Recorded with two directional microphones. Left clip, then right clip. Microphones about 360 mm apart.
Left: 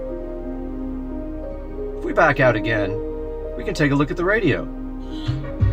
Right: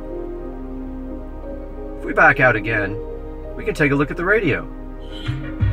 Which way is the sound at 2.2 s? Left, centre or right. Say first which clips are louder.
Right 3 dB; centre.